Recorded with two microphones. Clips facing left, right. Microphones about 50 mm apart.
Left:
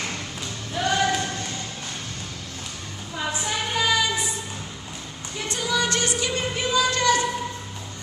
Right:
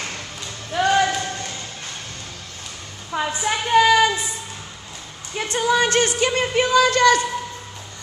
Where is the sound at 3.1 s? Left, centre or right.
Right.